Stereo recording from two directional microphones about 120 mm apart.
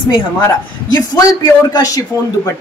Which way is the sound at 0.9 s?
35° left (ahead or behind).